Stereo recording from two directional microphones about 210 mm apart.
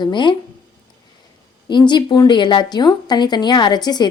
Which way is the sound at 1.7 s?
20° left (ahead or behind).